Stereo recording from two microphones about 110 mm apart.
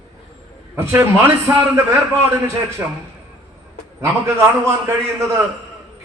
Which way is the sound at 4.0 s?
25° right (ahead or behind).